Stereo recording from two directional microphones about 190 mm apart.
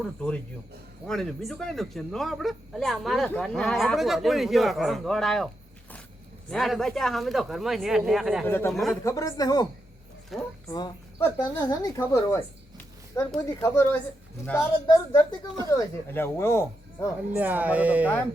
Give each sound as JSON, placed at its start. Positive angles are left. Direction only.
{"t": 0.0, "sound": "speech", "side_deg": 5}
{"t": 6.5, "sound": "speech", "side_deg": 0}
{"t": 8.4, "sound": "speech", "side_deg": 10}
{"t": 8.7, "sound": "speech", "side_deg": 0}
{"t": 9.0, "sound": "speech", "side_deg": 15}
{"t": 10.3, "sound": "speech", "side_deg": 0}
{"t": 10.7, "sound": "speech", "side_deg": 20}
{"t": 17.3, "sound": "speech", "side_deg": -10}